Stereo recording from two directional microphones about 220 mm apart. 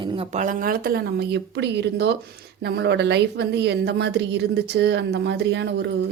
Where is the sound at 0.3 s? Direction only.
35° right (ahead or behind).